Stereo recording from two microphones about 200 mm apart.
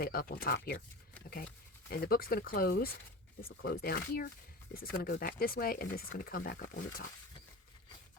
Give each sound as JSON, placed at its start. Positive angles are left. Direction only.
{"t": 0.0, "sound": "speech", "side_deg": 45}
{"t": 1.9, "sound": "speech", "side_deg": 50}